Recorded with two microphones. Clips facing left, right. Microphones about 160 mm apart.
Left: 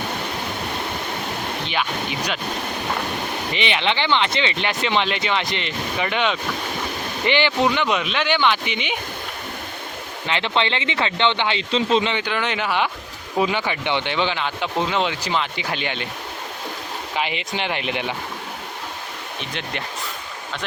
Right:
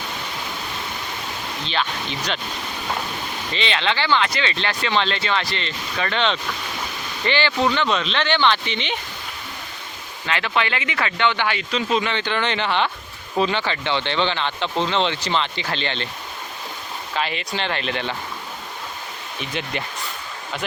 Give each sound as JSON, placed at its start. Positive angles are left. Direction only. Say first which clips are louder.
{"t": 1.6, "sound": "speech", "louder": "right 1 dB", "side_deg": 10}
{"t": 3.5, "sound": "speech", "louder": "even", "side_deg": 15}
{"t": 10.2, "sound": "speech", "louder": "left 1 dB", "side_deg": 20}
{"t": 12.1, "sound": "speech", "louder": "right 1 dB", "side_deg": 5}
{"t": 17.2, "sound": "speech", "louder": "even", "side_deg": 15}
{"t": 19.4, "sound": "speech", "louder": "right 3 dB", "side_deg": -5}